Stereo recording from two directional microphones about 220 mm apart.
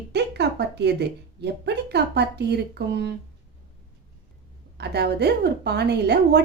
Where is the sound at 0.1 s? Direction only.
50° right (ahead or behind).